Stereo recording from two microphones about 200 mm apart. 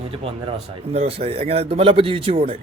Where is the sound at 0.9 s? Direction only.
30° right (ahead or behind).